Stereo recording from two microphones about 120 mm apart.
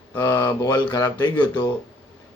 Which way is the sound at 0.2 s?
30° left (ahead or behind).